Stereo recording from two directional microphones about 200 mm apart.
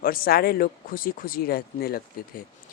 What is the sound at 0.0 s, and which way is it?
Speech, 45° left (ahead or behind).